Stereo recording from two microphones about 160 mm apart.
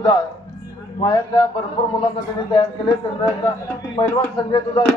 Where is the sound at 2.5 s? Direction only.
25° left (ahead or behind).